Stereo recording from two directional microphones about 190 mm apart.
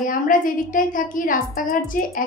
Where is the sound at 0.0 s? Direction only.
45° left (ahead or behind).